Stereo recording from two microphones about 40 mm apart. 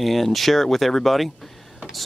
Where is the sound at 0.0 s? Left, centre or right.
Centre.